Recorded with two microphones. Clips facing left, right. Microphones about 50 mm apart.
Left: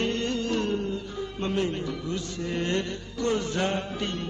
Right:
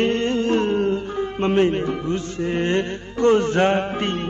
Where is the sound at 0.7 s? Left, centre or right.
Right.